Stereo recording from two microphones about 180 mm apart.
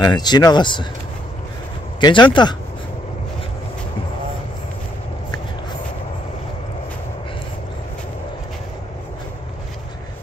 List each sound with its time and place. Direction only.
0.0 s speech: 25° left (ahead or behind)
2.0 s speech: 25° left (ahead or behind)